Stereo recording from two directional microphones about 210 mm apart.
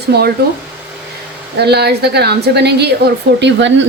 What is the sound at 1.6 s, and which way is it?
Speech, 50° right (ahead or behind).